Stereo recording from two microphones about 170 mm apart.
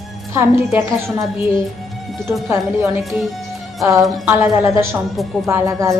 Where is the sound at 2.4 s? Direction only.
15° right (ahead or behind).